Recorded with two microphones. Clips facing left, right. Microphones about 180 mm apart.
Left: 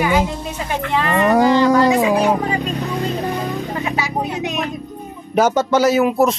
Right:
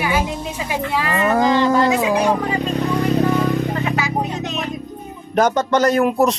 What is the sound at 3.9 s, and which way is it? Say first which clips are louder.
Music: even; 10° left (ahead or behind).